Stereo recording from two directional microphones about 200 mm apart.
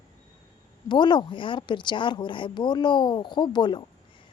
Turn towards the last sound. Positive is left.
turn(degrees=20)  # may be behind; listen again after turning